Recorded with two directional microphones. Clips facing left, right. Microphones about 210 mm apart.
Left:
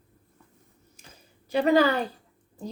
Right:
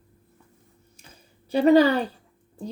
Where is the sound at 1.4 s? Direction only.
30° right (ahead or behind).